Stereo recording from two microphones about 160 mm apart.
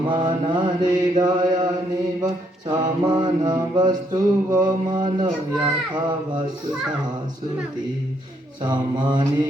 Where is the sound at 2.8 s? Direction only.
25° right (ahead or behind).